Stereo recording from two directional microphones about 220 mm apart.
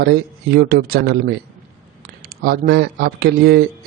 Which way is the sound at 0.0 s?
45° right (ahead or behind).